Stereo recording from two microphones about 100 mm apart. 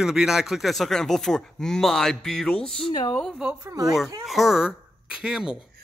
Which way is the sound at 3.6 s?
35° right (ahead or behind).